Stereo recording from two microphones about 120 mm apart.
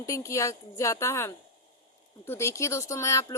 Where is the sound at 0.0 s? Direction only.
25° left (ahead or behind).